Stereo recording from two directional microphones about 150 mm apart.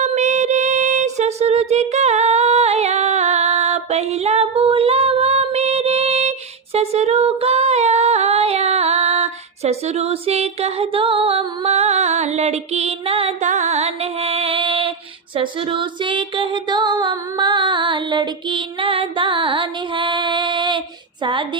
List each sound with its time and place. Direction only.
0.0 s music: 50° right (ahead or behind)
6.7 s female singing: 45° right (ahead or behind)
13.5 s music: 50° right (ahead or behind)
15.4 s female singing: 35° right (ahead or behind)